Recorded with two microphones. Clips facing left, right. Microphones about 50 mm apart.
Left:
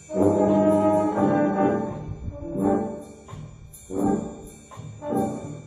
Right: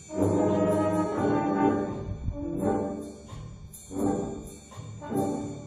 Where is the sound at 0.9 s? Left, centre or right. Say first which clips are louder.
Left 5 dB; left.